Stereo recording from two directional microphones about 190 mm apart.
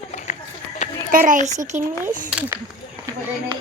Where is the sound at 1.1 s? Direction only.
45° right (ahead or behind).